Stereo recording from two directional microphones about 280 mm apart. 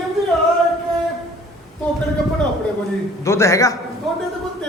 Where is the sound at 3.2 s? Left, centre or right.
Centre.